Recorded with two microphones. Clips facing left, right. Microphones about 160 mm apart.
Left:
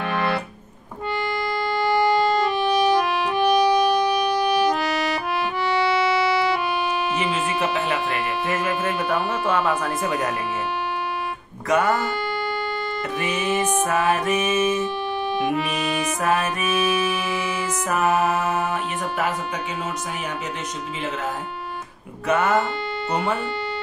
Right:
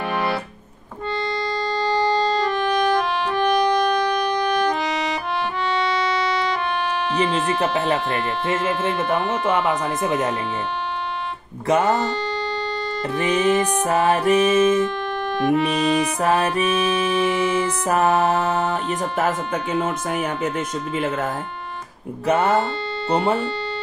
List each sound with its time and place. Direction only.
1.1 s music: 10° left (ahead or behind)
8.8 s speech: 20° right (ahead or behind)
11.6 s speech: 30° right (ahead or behind)
13.1 s speech: 30° right (ahead or behind)
14.6 s music: 10° left (ahead or behind)
15.7 s speech: 30° right (ahead or behind)
16.6 s music: 10° left (ahead or behind)
17.6 s speech: 30° right (ahead or behind)
22.2 s speech: 30° right (ahead or behind)